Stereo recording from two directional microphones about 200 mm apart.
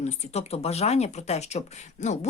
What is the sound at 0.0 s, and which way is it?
Speech, 30° left (ahead or behind).